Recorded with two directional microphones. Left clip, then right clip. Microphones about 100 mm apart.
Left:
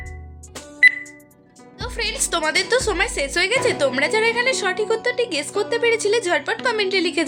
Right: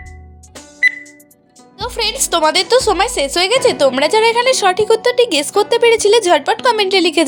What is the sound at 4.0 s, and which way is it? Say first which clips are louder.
A woman's voice: right 5 dB; 75° right (ahead or behind).